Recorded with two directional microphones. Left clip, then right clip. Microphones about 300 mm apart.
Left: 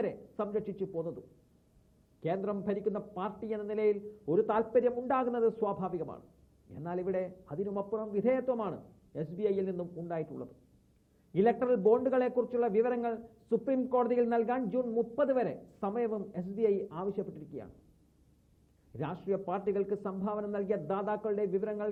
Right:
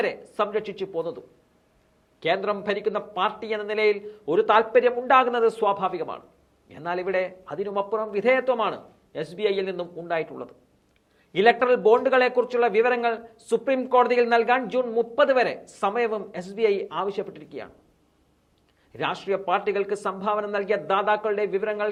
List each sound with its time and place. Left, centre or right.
0.0 s a man's voice: centre
2.2 s a man's voice: centre
9.8 s speech: right
10.1 s a man's voice: centre
18.9 s a man's voice: centre